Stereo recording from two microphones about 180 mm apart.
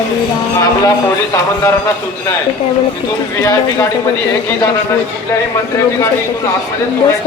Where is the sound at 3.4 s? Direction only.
20° left (ahead or behind).